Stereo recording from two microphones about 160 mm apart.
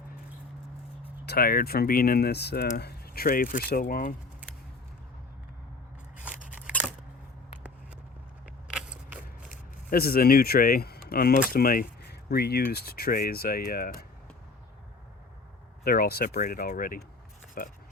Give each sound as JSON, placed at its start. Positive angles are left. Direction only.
{"t": 1.2, "sound": "speech", "side_deg": 80}
{"t": 6.5, "sound": "scissors", "side_deg": -10}
{"t": 8.7, "sound": "a sound", "side_deg": -5}
{"t": 9.9, "sound": "speech", "side_deg": 70}
{"t": 15.8, "sound": "speech", "side_deg": 70}